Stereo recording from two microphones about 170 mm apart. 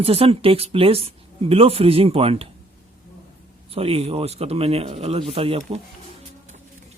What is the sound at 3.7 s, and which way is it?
Speech, 35° right (ahead or behind).